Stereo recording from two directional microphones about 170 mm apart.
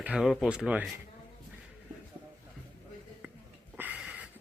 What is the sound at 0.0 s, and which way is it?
Speech, 5° right (ahead or behind).